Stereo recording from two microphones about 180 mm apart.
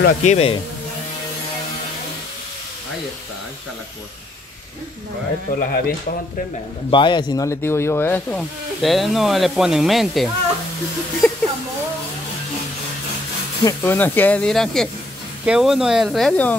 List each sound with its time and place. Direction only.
0.0 s speech: 40° left (ahead or behind)
5.5 s speech: 50° left (ahead or behind)
6.9 s speech: 25° left (ahead or behind); by 10.3 s centre (ahead or behind)
13.7 s speech: 10° left (ahead or behind)